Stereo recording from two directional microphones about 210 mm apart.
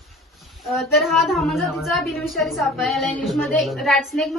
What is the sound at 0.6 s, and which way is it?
A woman's voice, centre (ahead or behind).